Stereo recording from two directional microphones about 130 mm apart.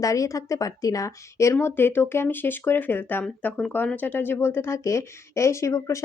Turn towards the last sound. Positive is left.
turn(degrees=25)  # may be behind; listen again after turning